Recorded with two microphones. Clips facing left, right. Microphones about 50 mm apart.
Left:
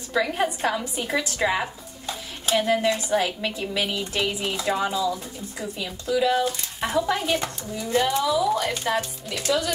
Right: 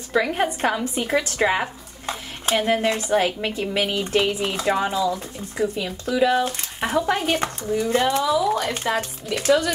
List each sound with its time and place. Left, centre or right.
0.1 s speech: right
0.5 s speech: right
1.3 s speech: right
3.6 s speech: centre
3.9 s speech: right
4.6 s speech: right
7.2 s speech: right